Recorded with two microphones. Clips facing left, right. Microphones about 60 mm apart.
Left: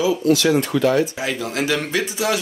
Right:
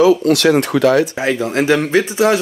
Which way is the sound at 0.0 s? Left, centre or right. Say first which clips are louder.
Right 6 dB; right.